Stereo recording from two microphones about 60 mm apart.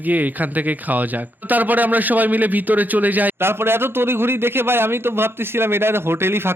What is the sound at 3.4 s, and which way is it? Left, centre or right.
A man's voice, right.